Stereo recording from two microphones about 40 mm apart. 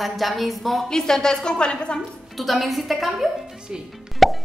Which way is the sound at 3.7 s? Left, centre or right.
Right.